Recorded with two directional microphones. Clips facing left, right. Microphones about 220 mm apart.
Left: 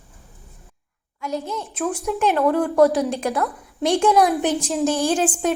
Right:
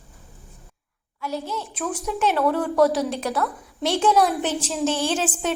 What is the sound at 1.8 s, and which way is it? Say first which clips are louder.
A woman's voice: left 3 dB; 10° left (ahead or behind).